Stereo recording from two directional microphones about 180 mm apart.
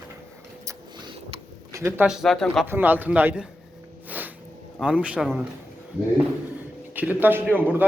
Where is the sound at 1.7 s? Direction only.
15° right (ahead or behind).